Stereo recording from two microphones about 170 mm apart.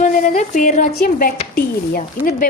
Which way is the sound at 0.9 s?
65° left (ahead or behind).